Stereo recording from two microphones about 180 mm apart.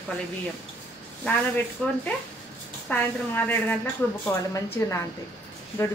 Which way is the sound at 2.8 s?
10° left (ahead or behind).